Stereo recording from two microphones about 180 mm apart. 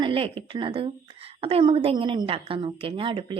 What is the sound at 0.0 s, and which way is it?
A woman's voice, 30° right (ahead or behind).